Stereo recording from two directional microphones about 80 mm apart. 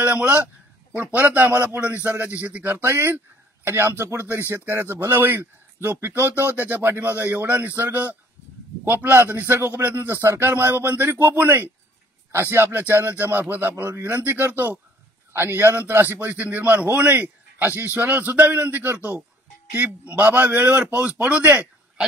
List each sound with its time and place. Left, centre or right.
0.0 s a man's voice: centre
13.8 s a man's voice: right